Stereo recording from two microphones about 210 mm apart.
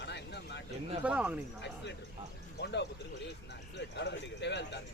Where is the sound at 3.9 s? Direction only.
55° left (ahead or behind).